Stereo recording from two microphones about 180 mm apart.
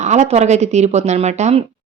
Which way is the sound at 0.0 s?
40° right (ahead or behind).